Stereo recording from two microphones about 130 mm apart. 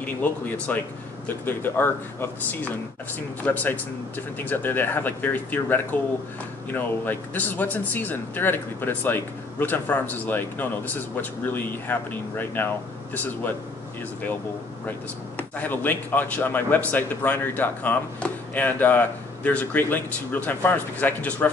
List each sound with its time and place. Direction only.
0.0 s speech: 10° left (ahead or behind)
14.9 s speech: 15° left (ahead or behind)